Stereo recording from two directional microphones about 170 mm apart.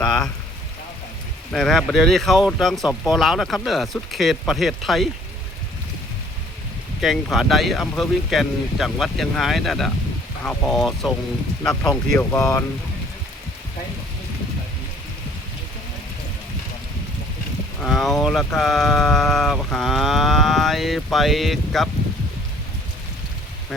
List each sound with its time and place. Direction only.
1.5 s speech: 5° left (ahead or behind)
7.0 s speech: centre (ahead or behind)
11.7 s speech: 20° left (ahead or behind)
17.7 s speech: centre (ahead or behind)